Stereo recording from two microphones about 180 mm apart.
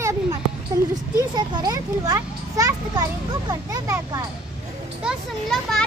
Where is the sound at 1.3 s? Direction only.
20° right (ahead or behind).